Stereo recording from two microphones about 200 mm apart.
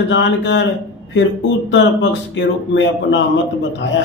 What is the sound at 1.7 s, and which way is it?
A man's voice, 65° left (ahead or behind).